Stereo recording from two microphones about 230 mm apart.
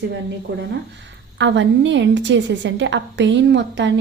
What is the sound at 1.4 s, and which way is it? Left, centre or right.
A woman's voice, right.